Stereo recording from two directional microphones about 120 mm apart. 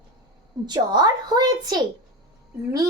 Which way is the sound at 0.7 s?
35° right (ahead or behind).